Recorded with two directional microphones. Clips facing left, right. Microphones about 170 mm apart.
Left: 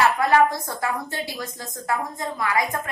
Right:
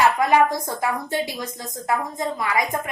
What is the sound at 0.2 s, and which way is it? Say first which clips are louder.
A woman's voice: right 1 dB; 15° right (ahead or behind).